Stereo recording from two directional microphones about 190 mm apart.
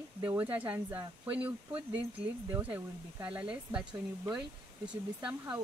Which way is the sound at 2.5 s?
10° right (ahead or behind).